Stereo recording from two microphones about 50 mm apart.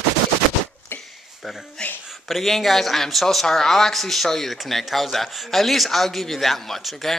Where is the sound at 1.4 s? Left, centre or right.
Centre.